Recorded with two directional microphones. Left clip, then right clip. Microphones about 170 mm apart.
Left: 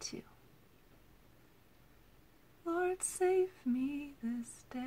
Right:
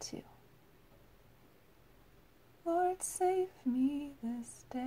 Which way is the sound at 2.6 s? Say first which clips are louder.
Right 3 dB; 20° right (ahead or behind).